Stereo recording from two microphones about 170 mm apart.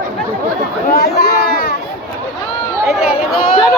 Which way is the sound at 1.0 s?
70° left (ahead or behind).